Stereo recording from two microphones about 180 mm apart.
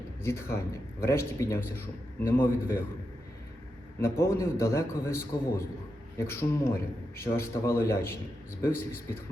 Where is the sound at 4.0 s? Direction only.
15° left (ahead or behind).